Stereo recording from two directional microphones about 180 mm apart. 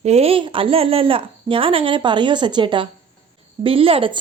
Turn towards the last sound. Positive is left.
turn(degrees=-30)  # may be behind; listen again after turning